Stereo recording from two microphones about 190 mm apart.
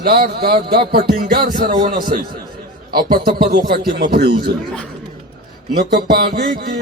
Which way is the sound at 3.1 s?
55° right (ahead or behind).